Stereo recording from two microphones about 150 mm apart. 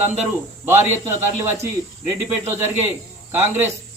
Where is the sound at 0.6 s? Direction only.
15° right (ahead or behind).